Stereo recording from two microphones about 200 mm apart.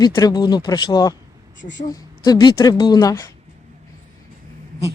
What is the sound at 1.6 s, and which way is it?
Speech, 65° left (ahead or behind).